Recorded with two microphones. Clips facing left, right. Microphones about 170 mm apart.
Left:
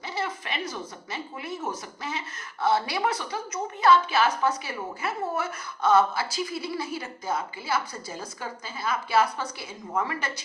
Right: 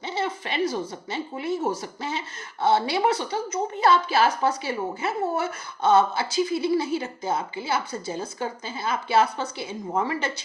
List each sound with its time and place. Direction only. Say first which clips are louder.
0.1 s speech: right 4 dB; 25° right (ahead or behind)